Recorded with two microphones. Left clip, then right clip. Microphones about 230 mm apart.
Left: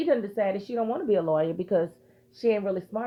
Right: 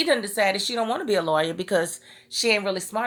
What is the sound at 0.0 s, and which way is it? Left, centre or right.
Speech, centre.